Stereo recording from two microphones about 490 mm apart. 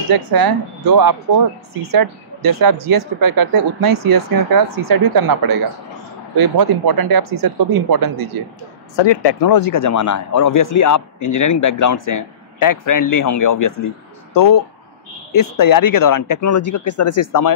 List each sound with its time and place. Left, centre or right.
0.1 s speech: right
8.9 s speech: left